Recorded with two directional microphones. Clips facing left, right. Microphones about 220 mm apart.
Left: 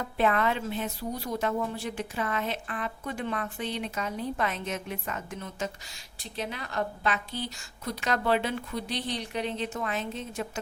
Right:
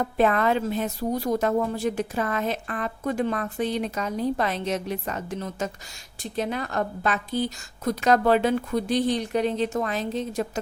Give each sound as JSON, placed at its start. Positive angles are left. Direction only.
{"t": 0.0, "sound": "a woman's voice", "side_deg": -45}
{"t": 6.3, "sound": "a woman's voice", "side_deg": -45}